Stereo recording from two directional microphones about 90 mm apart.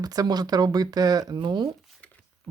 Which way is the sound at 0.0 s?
45° right (ahead or behind).